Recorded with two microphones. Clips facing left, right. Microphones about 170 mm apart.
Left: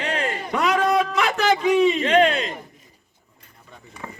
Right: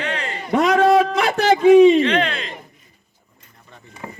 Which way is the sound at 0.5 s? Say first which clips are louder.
Right 6 dB; 35° right (ahead or behind).